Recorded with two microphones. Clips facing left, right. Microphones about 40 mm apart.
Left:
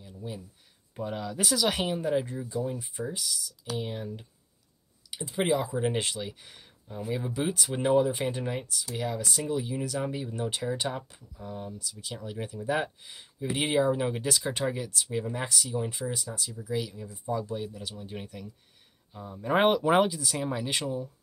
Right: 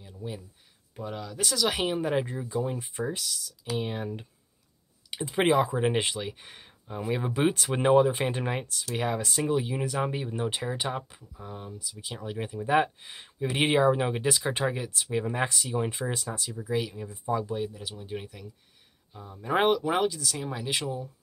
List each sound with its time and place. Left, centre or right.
0.2 s speech: centre
0.9 s speech: centre
1.8 s speech: right
16.5 s speech: right; by 19.7 s centre
19.7 s speech: centre